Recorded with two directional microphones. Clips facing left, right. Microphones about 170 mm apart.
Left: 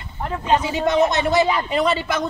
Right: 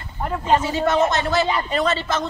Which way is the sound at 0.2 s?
5° right (ahead or behind).